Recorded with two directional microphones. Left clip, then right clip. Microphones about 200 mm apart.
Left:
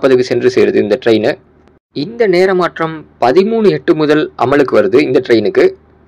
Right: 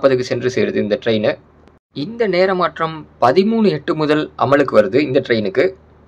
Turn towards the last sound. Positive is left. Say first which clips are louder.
# left 6 dB
turn(degrees=20)  # may be behind; listen again after turning